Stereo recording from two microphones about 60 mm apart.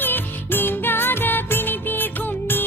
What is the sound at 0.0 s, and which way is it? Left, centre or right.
Music, left.